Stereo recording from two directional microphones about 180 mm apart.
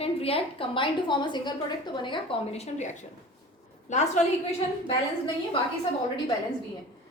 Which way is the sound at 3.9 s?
40° left (ahead or behind).